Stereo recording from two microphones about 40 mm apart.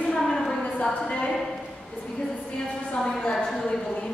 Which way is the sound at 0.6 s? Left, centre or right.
Left.